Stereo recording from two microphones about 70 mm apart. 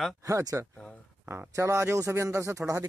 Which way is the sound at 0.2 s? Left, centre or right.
Right.